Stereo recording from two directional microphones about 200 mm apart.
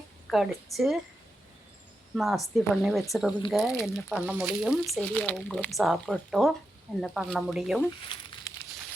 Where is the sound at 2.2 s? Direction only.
Centre (ahead or behind).